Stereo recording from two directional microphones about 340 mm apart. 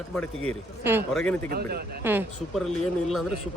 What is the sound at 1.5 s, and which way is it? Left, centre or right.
Speech, right.